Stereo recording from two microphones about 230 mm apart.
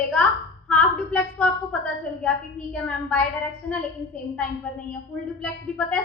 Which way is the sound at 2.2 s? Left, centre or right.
Centre.